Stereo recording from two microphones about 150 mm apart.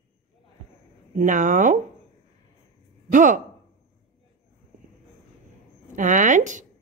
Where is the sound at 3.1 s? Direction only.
60° right (ahead or behind).